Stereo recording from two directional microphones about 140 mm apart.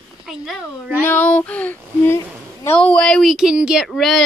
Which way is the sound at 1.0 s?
15° left (ahead or behind).